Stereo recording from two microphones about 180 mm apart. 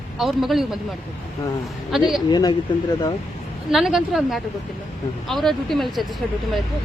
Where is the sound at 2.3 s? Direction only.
20° left (ahead or behind).